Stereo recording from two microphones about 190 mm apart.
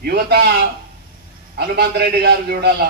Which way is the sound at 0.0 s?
55° right (ahead or behind).